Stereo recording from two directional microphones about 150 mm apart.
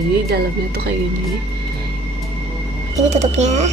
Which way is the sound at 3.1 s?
50° right (ahead or behind).